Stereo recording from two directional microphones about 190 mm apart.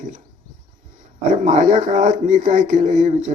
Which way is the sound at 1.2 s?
40° right (ahead or behind).